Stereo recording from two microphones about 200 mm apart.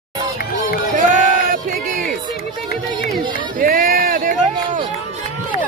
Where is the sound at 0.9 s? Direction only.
40° right (ahead or behind).